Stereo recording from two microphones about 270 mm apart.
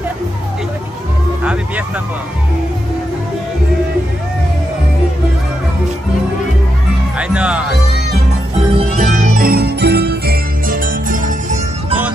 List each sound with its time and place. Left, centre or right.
7.2 s music: centre
8.7 s music: right